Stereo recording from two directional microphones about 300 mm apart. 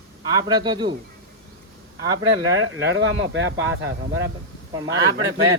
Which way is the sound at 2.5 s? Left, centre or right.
Right.